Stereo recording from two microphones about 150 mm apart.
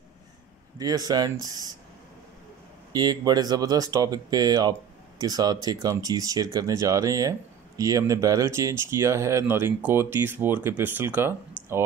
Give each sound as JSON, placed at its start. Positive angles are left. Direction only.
{"t": 0.7, "sound": "speech", "side_deg": -25}
{"t": 2.9, "sound": "speech", "side_deg": -25}
{"t": 11.6, "sound": "clicking", "side_deg": 10}